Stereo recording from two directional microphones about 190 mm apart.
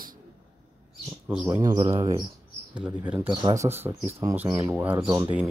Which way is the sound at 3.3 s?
20° right (ahead or behind).